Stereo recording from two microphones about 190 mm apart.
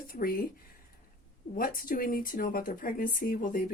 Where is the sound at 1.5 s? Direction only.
50° left (ahead or behind).